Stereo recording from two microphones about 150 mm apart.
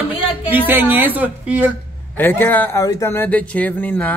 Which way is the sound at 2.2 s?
15° left (ahead or behind).